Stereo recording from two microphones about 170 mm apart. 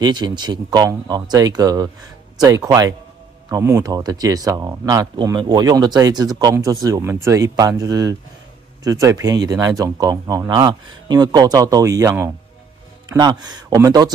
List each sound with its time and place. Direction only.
0.0 s speech: 25° right (ahead or behind)